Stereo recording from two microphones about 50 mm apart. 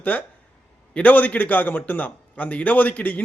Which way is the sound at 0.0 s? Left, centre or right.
Left.